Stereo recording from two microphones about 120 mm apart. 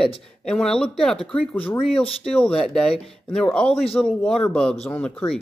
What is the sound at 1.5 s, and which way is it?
Speech, 15° left (ahead or behind).